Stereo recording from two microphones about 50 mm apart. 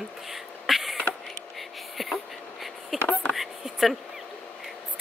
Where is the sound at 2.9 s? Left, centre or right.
Left.